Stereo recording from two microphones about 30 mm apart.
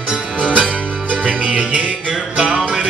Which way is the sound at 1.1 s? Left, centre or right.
Right.